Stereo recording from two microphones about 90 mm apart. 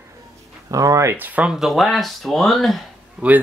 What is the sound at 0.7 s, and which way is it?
Speech, 40° right (ahead or behind).